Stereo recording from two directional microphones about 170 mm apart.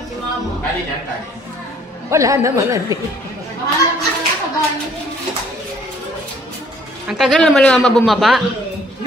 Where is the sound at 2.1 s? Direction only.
15° right (ahead or behind).